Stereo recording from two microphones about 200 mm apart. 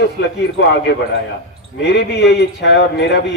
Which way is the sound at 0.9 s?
55° left (ahead or behind).